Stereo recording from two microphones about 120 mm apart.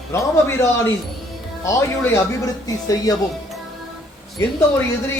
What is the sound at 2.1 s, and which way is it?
Speech, 30° left (ahead or behind).